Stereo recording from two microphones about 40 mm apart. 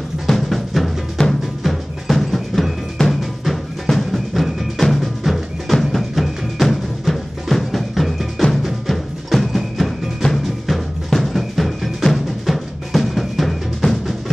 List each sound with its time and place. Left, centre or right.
0.3 s drum: centre
1.2 s music: left
1.6 s music: centre